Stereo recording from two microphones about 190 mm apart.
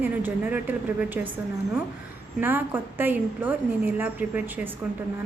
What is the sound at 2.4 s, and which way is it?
A woman's voice, 10° right (ahead or behind).